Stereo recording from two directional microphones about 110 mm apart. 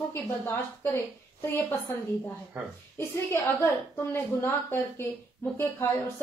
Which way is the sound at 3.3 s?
25° left (ahead or behind).